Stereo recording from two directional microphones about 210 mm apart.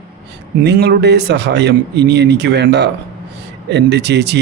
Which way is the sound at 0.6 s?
50° right (ahead or behind).